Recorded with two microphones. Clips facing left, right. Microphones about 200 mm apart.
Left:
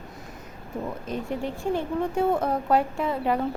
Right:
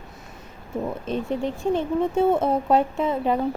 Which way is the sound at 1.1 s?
20° right (ahead or behind).